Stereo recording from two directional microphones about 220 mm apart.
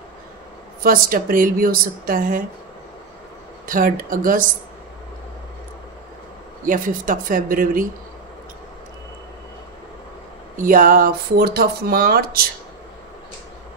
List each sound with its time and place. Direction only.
0.8 s a woman's voice: 40° right (ahead or behind)
3.6 s a woman's voice: 40° right (ahead or behind)
6.6 s a woman's voice: 40° right (ahead or behind)
10.6 s speech: 40° right (ahead or behind)